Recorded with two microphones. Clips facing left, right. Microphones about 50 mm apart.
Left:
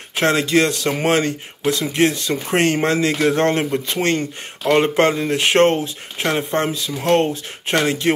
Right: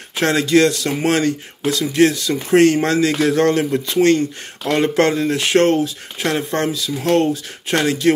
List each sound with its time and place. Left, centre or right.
0.2 s speech: left
5.4 s speech: left
6.8 s speech: left